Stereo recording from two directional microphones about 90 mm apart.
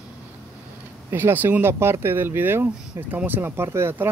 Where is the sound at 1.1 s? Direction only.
25° right (ahead or behind).